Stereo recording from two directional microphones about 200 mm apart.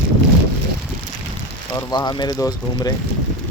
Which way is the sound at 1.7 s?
20° left (ahead or behind).